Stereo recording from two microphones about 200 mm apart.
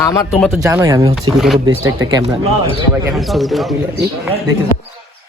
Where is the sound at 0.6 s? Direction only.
15° right (ahead or behind).